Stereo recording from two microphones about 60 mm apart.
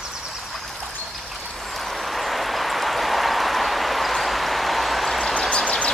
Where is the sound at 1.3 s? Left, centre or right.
Centre.